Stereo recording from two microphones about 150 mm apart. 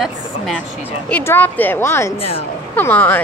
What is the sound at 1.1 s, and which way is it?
A woman's voice, 10° left (ahead or behind).